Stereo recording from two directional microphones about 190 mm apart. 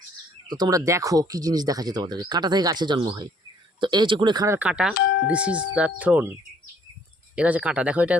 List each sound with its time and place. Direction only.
0.4 s speech: 20° right (ahead or behind)
7.3 s speech: 5° right (ahead or behind)